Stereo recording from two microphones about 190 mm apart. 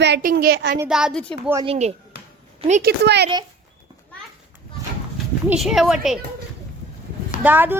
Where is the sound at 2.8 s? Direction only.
60° right (ahead or behind).